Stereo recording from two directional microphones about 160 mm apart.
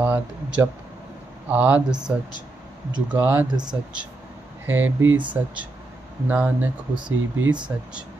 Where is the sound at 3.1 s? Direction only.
10° right (ahead or behind).